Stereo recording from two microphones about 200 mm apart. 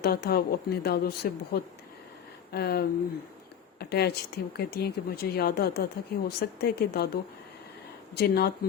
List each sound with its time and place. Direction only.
0.0 s speech: 50° left (ahead or behind)
2.5 s speech: 50° left (ahead or behind)